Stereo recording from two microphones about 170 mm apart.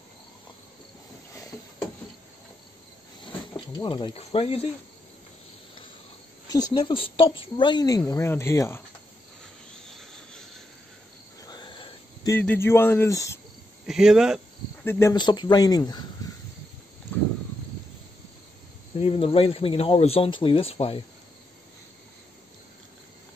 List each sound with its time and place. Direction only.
3.5 s speech: 25° left (ahead or behind)
6.5 s speech: 25° left (ahead or behind)
11.4 s a sound: 25° left (ahead or behind)
12.3 s speech: 15° left (ahead or behind)
13.8 s speech: 5° right (ahead or behind)
14.9 s speech: 15° left (ahead or behind)
15.1 s speech: 25° left (ahead or behind)
19.0 s speech: 30° left (ahead or behind)